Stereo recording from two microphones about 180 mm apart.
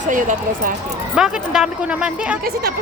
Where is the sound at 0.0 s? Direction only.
45° right (ahead or behind).